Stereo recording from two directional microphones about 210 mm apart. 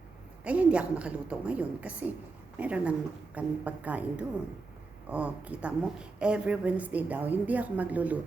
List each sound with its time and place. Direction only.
0.4 s a woman's voice: 5° right (ahead or behind)